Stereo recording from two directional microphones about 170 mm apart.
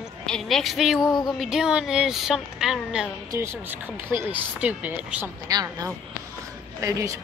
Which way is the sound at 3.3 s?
15° right (ahead or behind).